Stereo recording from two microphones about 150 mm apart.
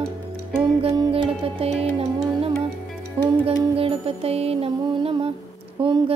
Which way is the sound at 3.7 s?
40° right (ahead or behind).